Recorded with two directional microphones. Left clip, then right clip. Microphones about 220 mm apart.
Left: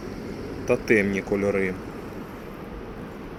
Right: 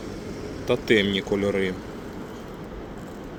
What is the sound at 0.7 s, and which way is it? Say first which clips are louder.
Speech: even; 5° right (ahead or behind).